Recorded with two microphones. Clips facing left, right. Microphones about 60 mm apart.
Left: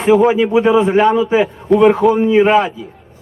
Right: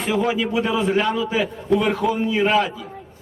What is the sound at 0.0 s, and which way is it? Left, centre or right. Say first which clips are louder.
A man's voice: left 10 dB; left.